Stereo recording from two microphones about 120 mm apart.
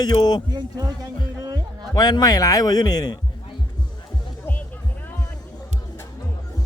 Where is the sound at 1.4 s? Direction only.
35° right (ahead or behind).